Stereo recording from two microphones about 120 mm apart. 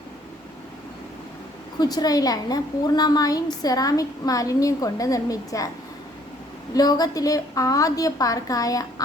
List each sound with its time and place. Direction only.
1.8 s a woman's voice: 35° left (ahead or behind)
6.7 s a woman's voice: 35° left (ahead or behind)